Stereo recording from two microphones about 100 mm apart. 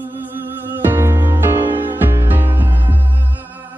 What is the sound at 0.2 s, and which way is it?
Music, 20° right (ahead or behind).